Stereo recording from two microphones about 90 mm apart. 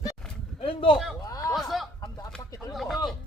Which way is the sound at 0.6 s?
75° left (ahead or behind).